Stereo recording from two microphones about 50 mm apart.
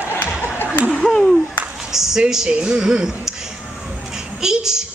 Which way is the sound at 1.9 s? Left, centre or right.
Centre.